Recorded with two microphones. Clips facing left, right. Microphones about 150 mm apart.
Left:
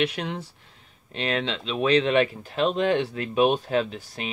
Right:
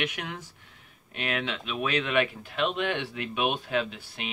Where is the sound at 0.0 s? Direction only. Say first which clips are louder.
Left 7 dB; 30° left (ahead or behind).